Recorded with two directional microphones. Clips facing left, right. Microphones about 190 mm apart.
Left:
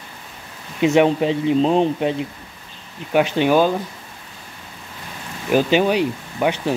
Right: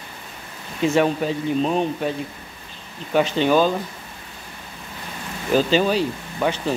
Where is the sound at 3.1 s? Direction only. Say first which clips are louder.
Left 2 dB; 10° left (ahead or behind).